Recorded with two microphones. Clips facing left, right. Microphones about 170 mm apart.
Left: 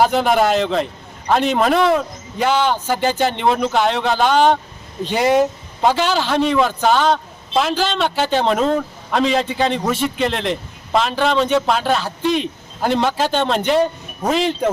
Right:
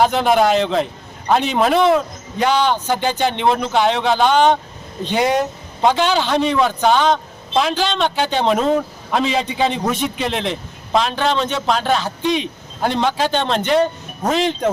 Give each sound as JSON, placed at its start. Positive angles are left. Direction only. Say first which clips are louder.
{"t": 0.0, "sound": "a man's voice", "louder": "even", "side_deg": 5}